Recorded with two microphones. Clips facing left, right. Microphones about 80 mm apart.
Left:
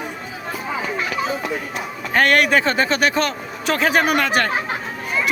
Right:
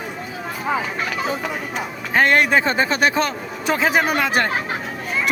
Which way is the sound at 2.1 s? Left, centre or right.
Right.